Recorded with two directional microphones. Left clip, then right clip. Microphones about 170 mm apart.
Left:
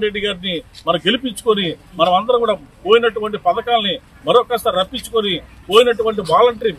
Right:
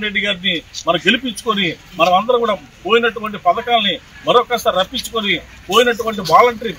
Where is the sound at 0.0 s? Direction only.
35° left (ahead or behind).